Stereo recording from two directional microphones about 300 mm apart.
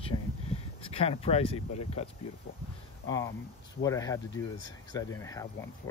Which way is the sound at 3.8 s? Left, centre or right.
Centre.